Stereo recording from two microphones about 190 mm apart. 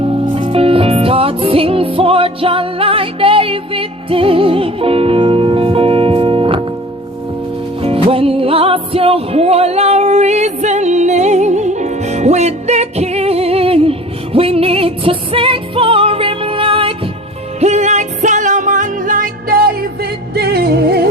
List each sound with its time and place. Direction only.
0.1 s music: 30° right (ahead or behind)
7.8 s music: 30° right (ahead or behind); by 21.0 s 55° right (ahead or behind)